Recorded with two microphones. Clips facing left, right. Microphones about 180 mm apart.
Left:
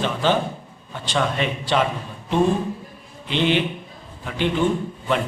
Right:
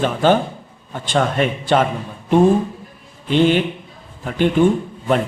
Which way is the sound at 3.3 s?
45° right (ahead or behind).